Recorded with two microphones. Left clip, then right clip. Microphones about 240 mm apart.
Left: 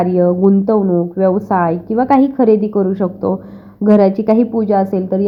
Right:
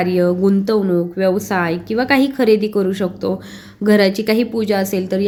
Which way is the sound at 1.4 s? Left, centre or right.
Centre.